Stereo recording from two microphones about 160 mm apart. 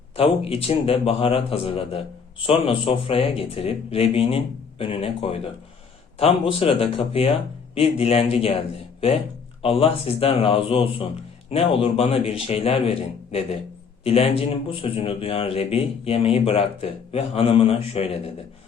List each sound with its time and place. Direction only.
0.2 s a man's voice: 35° left (ahead or behind)
9.6 s a man's voice: 35° left (ahead or behind)